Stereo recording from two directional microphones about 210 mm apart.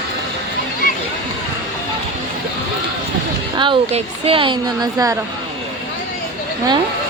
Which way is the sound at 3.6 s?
25° right (ahead or behind).